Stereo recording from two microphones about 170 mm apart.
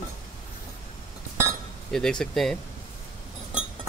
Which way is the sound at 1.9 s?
5° left (ahead or behind).